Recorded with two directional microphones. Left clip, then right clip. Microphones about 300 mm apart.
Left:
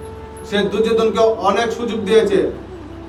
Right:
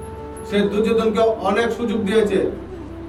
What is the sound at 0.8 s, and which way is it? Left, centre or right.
A man's voice, centre.